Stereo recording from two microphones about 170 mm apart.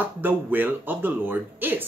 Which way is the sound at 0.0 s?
10° right (ahead or behind).